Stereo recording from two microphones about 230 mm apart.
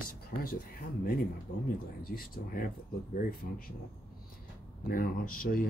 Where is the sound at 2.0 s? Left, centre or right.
Left.